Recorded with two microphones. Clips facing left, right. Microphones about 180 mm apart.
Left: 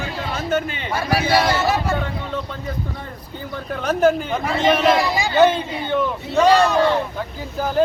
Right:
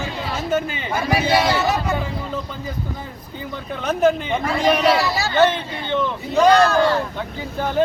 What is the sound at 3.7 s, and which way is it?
Speech, centre (ahead or behind).